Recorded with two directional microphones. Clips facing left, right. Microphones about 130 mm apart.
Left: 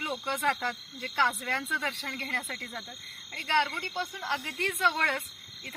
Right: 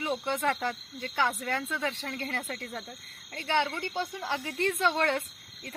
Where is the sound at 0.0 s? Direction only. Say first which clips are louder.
Right 2 dB; 15° right (ahead or behind).